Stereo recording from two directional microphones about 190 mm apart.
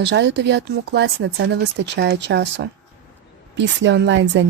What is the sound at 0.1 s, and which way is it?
Speech, 65° right (ahead or behind).